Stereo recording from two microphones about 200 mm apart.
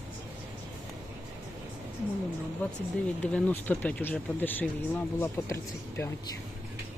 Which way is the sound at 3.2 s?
5° left (ahead or behind).